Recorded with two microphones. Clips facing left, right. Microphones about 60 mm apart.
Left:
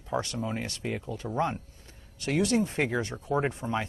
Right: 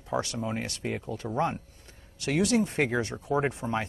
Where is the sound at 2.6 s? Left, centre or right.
Right.